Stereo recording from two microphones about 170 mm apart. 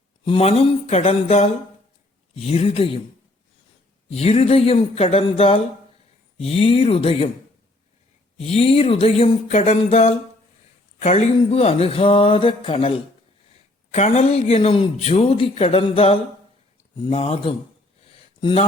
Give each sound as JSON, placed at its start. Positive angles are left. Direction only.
{"t": 0.3, "sound": "speech", "side_deg": 35}
{"t": 4.1, "sound": "speech", "side_deg": 40}
{"t": 8.4, "sound": "speech", "side_deg": 35}
{"t": 13.9, "sound": "speech", "side_deg": 40}